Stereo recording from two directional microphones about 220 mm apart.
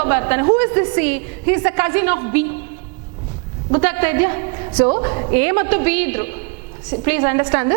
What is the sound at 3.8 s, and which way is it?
A woman's voice, 10° right (ahead or behind).